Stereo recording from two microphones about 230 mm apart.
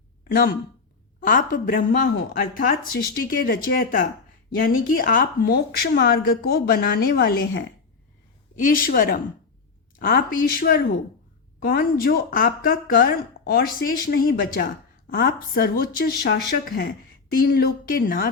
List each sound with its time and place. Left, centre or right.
1.2 s speech: left